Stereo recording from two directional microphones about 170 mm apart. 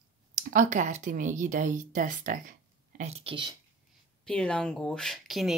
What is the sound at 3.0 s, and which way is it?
Speech, 40° right (ahead or behind).